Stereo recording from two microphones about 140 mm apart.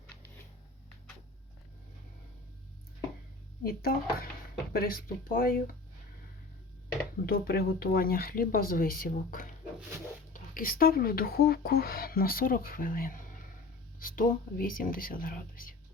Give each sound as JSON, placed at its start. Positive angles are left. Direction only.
{"t": 3.6, "sound": "speech", "side_deg": 90}
{"t": 7.3, "sound": "speech", "side_deg": 90}
{"t": 10.3, "sound": "speech", "side_deg": 85}